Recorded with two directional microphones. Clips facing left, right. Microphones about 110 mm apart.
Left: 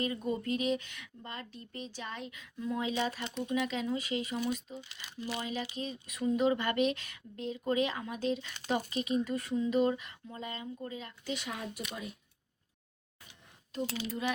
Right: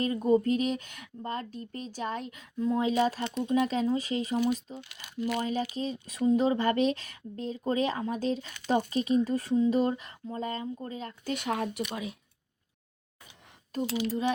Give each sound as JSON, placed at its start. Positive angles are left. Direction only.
{"t": 0.0, "sound": "speech", "side_deg": -40}
{"t": 14.1, "sound": "speech", "side_deg": -35}